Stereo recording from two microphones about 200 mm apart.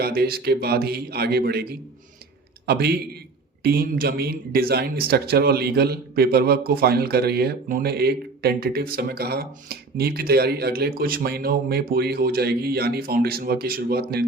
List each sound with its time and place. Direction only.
0.0 s speech: 50° right (ahead or behind)
2.6 s speech: 50° right (ahead or behind)